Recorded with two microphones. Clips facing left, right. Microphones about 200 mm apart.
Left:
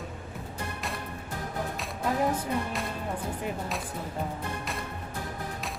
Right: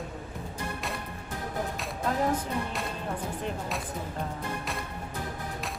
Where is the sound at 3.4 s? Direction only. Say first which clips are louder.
Even; centre (ahead or behind).